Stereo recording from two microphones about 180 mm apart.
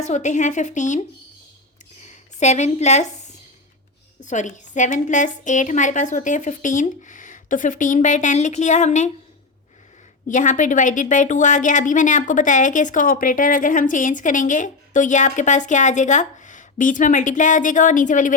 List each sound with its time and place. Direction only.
0.0 s a woman's voice: 40° left (ahead or behind)
2.0 s a woman's voice: 40° left (ahead or behind)
4.2 s a woman's voice: 45° left (ahead or behind)
10.2 s a woman's voice: 45° left (ahead or behind)